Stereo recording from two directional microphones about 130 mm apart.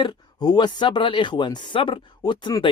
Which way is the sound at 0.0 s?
35° left (ahead or behind).